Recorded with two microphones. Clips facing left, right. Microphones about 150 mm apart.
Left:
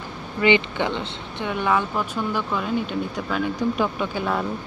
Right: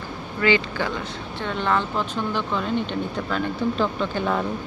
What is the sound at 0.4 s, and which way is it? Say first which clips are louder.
Speech: left 2 dB; 20° left (ahead or behind).